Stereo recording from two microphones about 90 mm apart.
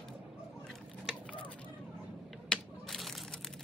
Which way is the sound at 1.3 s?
15° left (ahead or behind).